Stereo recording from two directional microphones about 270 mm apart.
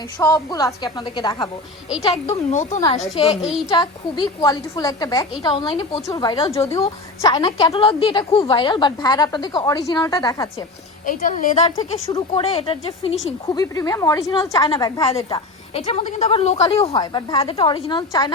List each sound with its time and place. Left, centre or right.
0.2 s a woman's voice: centre
2.5 s a woman's voice: left
11.0 s a woman's voice: left